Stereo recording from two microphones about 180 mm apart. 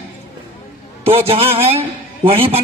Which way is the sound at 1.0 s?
35° right (ahead or behind).